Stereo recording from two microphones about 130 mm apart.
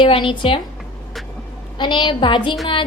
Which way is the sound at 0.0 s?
40° left (ahead or behind).